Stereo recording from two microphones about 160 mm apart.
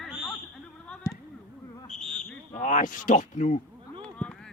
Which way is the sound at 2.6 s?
50° left (ahead or behind).